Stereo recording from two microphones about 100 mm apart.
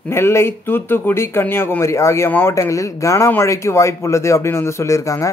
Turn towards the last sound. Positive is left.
turn(degrees=30)  # may be behind; listen again after turning